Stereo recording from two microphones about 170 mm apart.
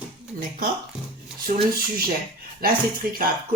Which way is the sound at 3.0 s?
65° right (ahead or behind).